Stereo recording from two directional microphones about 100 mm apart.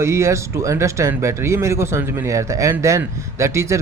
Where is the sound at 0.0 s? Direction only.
30° right (ahead or behind).